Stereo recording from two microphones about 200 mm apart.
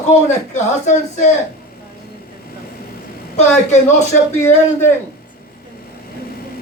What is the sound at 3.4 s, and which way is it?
Speech, 35° left (ahead or behind).